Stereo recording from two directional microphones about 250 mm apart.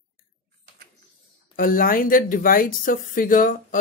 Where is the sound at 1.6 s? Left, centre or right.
Left.